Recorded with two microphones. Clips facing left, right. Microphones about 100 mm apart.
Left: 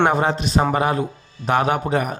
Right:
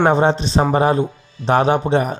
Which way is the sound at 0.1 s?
30° right (ahead or behind).